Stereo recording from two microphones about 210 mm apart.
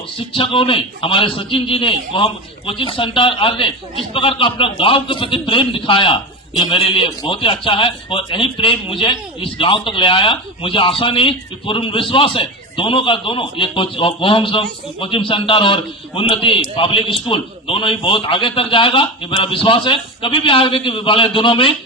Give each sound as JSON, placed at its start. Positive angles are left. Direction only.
{"t": 0.2, "sound": "speech", "side_deg": 25}